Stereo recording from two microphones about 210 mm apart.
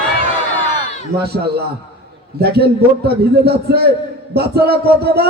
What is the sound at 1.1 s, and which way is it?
A man's voice, 50° right (ahead or behind).